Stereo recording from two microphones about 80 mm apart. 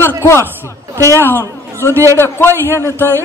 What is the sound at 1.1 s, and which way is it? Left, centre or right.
Speech, left.